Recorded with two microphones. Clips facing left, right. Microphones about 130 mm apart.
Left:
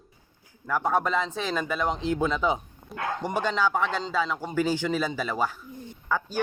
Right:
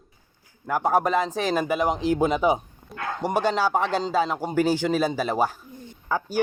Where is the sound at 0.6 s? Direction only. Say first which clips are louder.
Right 3 dB; 30° right (ahead or behind).